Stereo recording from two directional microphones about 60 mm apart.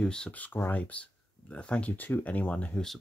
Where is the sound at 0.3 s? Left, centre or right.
Left.